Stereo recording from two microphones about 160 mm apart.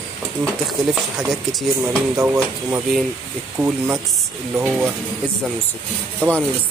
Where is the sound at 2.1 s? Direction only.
20° right (ahead or behind).